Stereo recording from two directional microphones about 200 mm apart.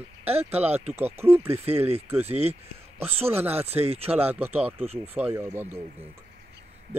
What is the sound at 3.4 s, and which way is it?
Speech, 10° right (ahead or behind).